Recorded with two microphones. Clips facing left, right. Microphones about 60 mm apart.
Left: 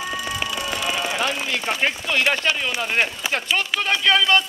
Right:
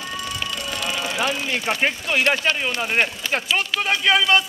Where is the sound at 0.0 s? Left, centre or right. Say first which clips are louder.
Left 2 dB; centre.